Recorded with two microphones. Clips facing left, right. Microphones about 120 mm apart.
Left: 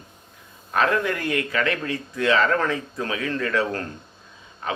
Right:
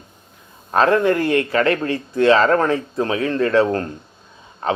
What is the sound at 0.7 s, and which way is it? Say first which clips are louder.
Speech: right 7 dB; 35° right (ahead or behind).